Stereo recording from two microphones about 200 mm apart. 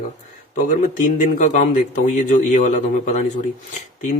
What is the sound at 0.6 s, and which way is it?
Speech, 40° left (ahead or behind).